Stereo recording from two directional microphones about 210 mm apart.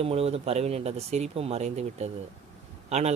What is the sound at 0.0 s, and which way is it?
Speech, 30° right (ahead or behind).